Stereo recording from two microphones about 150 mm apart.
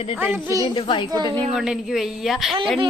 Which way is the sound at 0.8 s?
35° left (ahead or behind).